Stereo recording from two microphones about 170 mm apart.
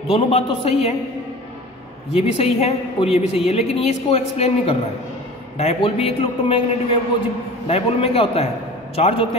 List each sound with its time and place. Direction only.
0.1 s a man's voice: 35° left (ahead or behind)
2.1 s a man's voice: 35° left (ahead or behind)